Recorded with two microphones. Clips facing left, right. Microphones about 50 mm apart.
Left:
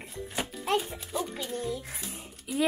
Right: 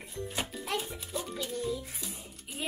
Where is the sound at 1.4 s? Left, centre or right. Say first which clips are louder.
Left 1 dB; left.